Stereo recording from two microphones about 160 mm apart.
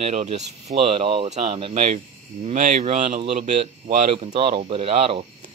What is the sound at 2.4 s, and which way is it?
Speech, 50° right (ahead or behind).